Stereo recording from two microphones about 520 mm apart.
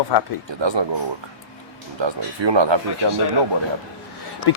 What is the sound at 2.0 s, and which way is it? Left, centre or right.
Speech, right.